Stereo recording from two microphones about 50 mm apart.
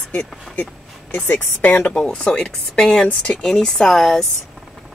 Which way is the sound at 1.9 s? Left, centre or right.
Centre.